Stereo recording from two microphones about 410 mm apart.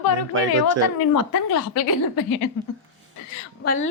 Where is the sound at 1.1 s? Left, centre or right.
Left.